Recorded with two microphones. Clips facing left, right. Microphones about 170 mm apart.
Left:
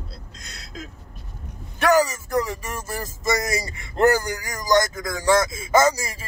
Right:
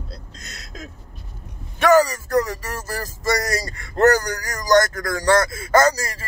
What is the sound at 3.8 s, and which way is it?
Speech, 20° left (ahead or behind).